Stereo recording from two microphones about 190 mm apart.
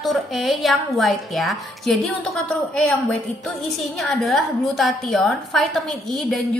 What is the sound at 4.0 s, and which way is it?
A woman's voice, centre (ahead or behind).